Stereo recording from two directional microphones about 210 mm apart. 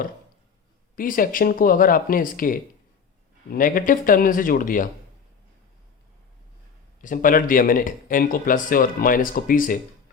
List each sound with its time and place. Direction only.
0.9 s speech: 40° left (ahead or behind)
7.0 s speech: 40° left (ahead or behind)